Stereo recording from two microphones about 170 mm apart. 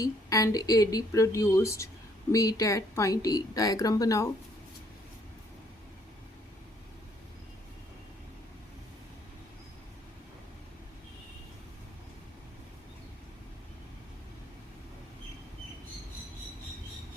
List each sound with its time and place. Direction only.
0.0 s a woman's voice: 20° left (ahead or behind)